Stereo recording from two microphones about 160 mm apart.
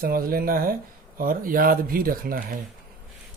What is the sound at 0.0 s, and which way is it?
Speech, 65° right (ahead or behind).